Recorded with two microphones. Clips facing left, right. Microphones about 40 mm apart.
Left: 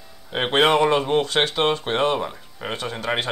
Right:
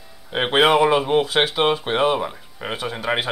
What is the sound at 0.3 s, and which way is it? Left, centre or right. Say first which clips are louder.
Speech: right 2 dB; centre.